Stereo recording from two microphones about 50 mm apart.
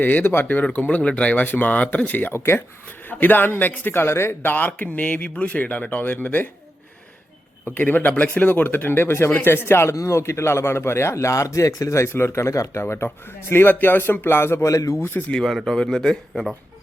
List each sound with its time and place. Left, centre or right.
0.0 s speech: left
0.6 s speech: left
2.3 s speech: left
3.1 s a man's voice: left
4.5 s speech: left
7.6 s a man's voice: left
9.9 s a man's voice: left
14.6 s speech: left
15.6 s speech: centre